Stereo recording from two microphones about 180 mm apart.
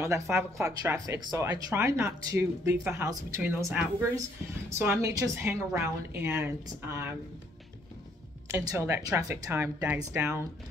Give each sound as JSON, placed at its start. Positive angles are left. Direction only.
{"t": 0.0, "sound": "speech", "side_deg": -15}
{"t": 8.5, "sound": "speech", "side_deg": -15}